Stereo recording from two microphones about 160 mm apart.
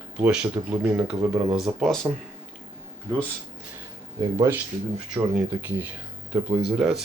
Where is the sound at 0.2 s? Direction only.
10° right (ahead or behind).